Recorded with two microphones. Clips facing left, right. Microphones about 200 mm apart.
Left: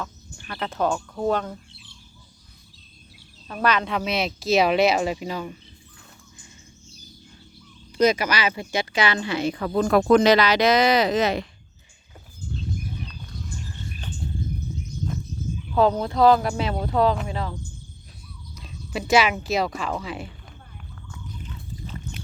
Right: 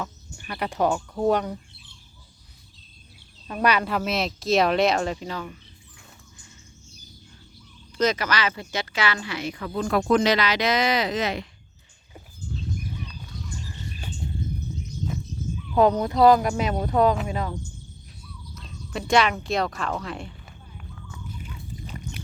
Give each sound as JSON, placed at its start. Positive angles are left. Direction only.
{"t": 0.0, "sound": "speech", "side_deg": -10}
{"t": 3.4, "sound": "speech", "side_deg": -10}
{"t": 7.9, "sound": "speech", "side_deg": 10}
{"t": 9.6, "sound": "speech", "side_deg": 55}
{"t": 10.4, "sound": "speech", "side_deg": 35}
{"t": 15.7, "sound": "speech", "side_deg": -5}
{"t": 16.7, "sound": "speech", "side_deg": 0}
{"t": 18.5, "sound": "speech", "side_deg": 5}
{"t": 20.7, "sound": "a sound", "side_deg": -5}